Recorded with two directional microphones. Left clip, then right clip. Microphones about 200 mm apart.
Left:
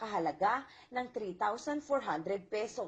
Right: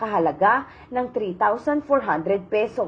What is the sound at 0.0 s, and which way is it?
A woman's voice, 20° left (ahead or behind).